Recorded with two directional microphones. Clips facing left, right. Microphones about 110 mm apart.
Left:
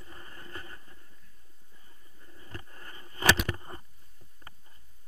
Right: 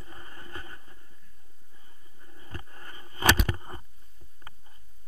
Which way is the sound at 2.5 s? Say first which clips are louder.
Right 2 dB; 20° right (ahead or behind).